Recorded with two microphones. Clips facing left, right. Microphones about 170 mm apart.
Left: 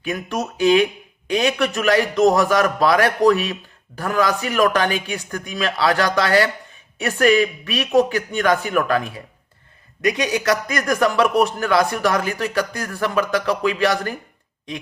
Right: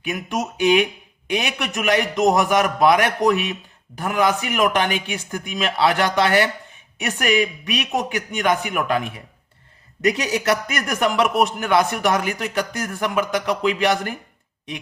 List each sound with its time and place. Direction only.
0.0 s a man's voice: 20° right (ahead or behind)
10.3 s a man's voice: 25° right (ahead or behind)